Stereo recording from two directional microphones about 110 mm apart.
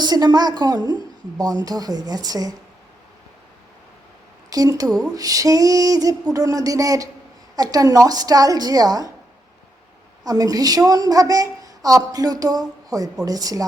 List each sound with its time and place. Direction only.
0.0 s a woman's voice: 40° right (ahead or behind)
4.4 s a woman's voice: 35° right (ahead or behind)
10.2 s a woman's voice: 35° right (ahead or behind)